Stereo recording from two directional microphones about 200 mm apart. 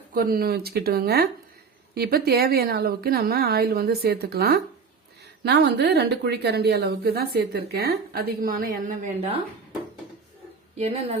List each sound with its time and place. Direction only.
0.1 s a woman's voice: 50° right (ahead or behind)
10.8 s a woman's voice: 30° right (ahead or behind)